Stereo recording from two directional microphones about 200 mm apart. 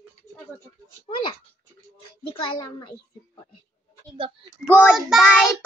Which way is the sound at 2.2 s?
25° left (ahead or behind).